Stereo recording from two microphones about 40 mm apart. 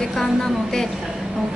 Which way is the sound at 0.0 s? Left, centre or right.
Centre.